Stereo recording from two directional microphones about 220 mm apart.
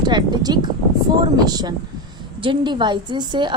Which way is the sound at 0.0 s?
20° right (ahead or behind).